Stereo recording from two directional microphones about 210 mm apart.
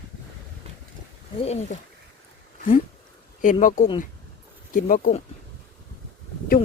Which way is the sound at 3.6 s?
35° left (ahead or behind).